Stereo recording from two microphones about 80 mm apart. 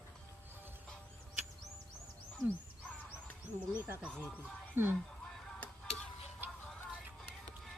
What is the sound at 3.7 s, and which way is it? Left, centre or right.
Speech, centre.